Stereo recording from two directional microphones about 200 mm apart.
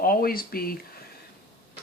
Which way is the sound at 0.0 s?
45° left (ahead or behind).